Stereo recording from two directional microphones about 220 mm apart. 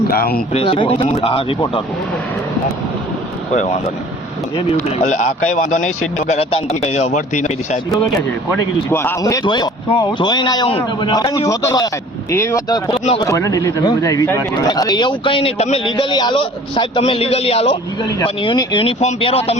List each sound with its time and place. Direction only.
0.1 s speech: 45° left (ahead or behind)
0.5 s speech: 25° left (ahead or behind)
3.5 s speech: 35° left (ahead or behind)
8.9 s speech: 10° left (ahead or behind); by 19.4 s 25° left (ahead or behind)